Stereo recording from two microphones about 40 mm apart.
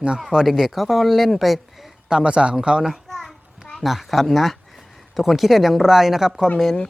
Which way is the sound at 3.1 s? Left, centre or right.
Centre.